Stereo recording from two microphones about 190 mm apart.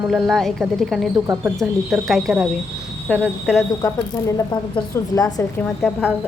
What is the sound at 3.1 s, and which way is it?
A woman's voice, 10° left (ahead or behind).